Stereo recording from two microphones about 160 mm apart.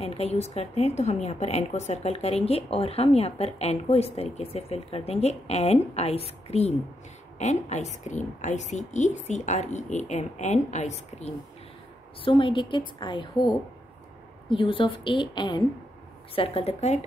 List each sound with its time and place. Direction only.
0.0 s a woman's voice: 40° left (ahead or behind)
12.3 s a woman's voice: 30° left (ahead or behind)